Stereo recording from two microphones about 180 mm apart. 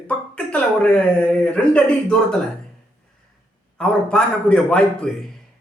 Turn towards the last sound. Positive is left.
turn(degrees=5)  # may be behind; listen again after turning